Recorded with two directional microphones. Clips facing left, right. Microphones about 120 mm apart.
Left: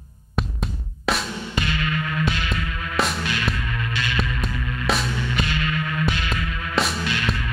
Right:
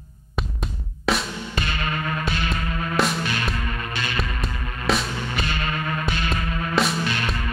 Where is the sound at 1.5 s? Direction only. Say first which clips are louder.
Left 2 dB; 40° right (ahead or behind).